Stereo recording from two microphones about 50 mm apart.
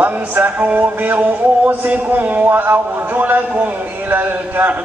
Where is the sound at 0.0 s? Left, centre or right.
Right.